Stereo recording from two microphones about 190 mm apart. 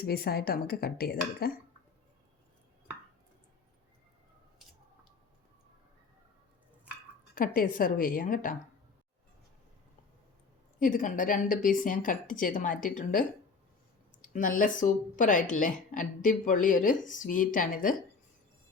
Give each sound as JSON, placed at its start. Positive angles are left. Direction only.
{"t": 0.0, "sound": "speech", "side_deg": 55}
{"t": 7.3, "sound": "speech", "side_deg": 50}
{"t": 10.8, "sound": "speech", "side_deg": 45}